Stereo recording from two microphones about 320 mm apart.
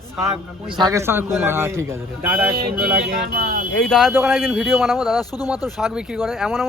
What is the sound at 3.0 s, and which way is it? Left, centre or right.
Speech, right.